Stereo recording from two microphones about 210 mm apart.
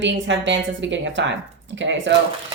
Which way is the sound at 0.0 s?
60° right (ahead or behind).